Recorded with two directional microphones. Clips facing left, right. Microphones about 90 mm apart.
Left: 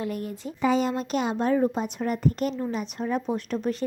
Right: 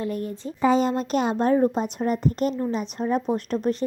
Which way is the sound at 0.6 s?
35° right (ahead or behind).